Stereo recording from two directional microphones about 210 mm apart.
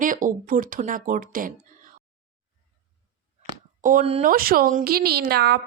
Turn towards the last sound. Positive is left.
turn(degrees=-50)  # may be behind; listen again after turning